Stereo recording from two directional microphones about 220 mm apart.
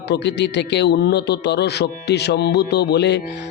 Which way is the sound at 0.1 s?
50° left (ahead or behind).